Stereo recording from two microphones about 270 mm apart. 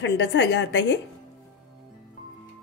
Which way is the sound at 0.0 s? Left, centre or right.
Left.